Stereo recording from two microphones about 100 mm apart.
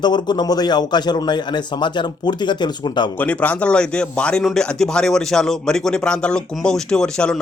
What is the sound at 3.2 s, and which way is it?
Speech, 15° left (ahead or behind).